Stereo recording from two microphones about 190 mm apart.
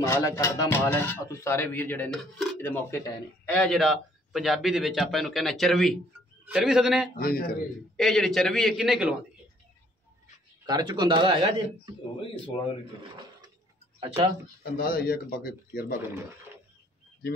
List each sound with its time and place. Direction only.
0.0 s speech: 15° left (ahead or behind); by 7.1 s 5° right (ahead or behind)
7.2 s speech: 50° left (ahead or behind)
8.0 s speech: centre (ahead or behind)
10.7 s speech: 25° right (ahead or behind)
13.9 s speech: 30° right (ahead or behind)
14.6 s speech: 50° left (ahead or behind)